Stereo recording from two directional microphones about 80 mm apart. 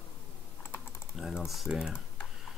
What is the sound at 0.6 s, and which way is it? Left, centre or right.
Typing, left.